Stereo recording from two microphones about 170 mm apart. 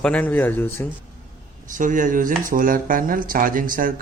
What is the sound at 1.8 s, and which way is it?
Speech, 50° right (ahead or behind).